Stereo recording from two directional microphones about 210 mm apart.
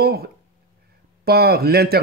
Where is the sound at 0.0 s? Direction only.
50° right (ahead or behind).